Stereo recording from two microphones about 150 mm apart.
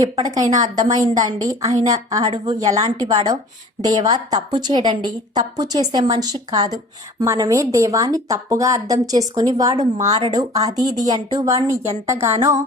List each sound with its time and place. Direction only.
0.0 s a woman's voice: 25° right (ahead or behind)